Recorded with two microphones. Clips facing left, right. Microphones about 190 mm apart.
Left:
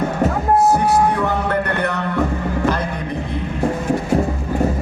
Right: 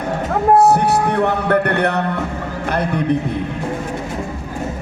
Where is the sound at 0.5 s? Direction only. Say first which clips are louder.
Right 3 dB; 65° right (ahead or behind).